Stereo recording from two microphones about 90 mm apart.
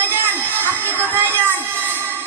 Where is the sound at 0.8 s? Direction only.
25° right (ahead or behind).